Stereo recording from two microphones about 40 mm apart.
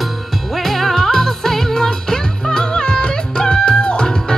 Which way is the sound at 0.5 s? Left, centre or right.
Centre.